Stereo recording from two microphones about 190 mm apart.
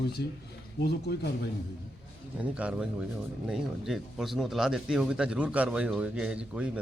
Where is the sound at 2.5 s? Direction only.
5° right (ahead or behind).